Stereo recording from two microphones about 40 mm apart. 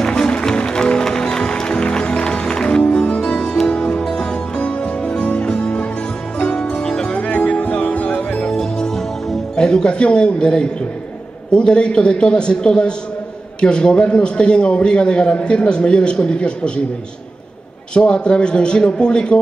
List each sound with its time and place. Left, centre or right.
0.1 s music: left
5.2 s music: left; by 7.2 s centre
7.2 s music: left
9.6 s a man's voice: centre
17.9 s a man's voice: left